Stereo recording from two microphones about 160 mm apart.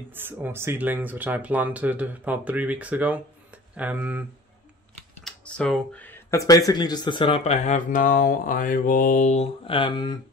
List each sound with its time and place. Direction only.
0.1 s speech: 15° right (ahead or behind)
5.2 s speech: 5° left (ahead or behind); by 9.5 s 50° left (ahead or behind)
9.7 s speech: 30° left (ahead or behind)